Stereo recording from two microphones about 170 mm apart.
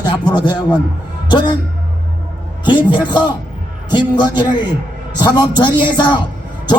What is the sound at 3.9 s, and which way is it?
A man's voice, 25° left (ahead or behind).